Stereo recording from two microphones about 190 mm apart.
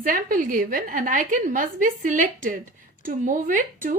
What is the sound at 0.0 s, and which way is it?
Speech, 45° right (ahead or behind).